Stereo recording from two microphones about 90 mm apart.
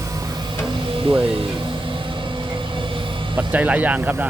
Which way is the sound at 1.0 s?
90° right.